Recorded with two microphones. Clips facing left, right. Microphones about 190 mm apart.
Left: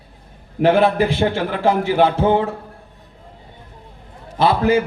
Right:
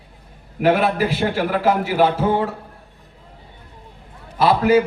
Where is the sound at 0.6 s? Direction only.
25° left (ahead or behind).